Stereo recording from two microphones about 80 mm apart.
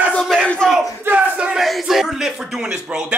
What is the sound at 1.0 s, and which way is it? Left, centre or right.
Battle cry, centre.